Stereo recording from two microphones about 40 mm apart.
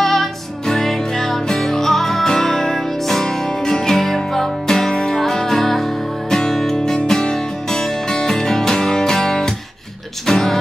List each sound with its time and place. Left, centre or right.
0.0 s music: centre